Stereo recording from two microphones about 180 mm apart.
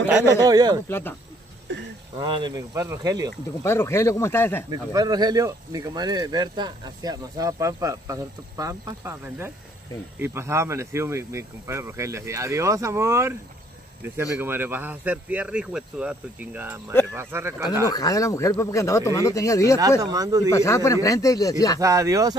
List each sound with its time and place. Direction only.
0.4 s speech: 20° right (ahead or behind)
0.8 s speech: 10° left (ahead or behind)
1.7 s speech: 90° right
2.1 s speech: 25° right (ahead or behind)
3.6 s speech: 15° left (ahead or behind)
4.6 s speech: 20° right (ahead or behind)
17.8 s speech: 20° left (ahead or behind)
20.0 s speech: 20° right (ahead or behind)
20.5 s speech: 15° left (ahead or behind)
21.7 s speech: 20° right (ahead or behind)